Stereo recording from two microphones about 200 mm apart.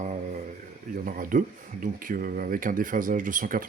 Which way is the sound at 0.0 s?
35° right (ahead or behind).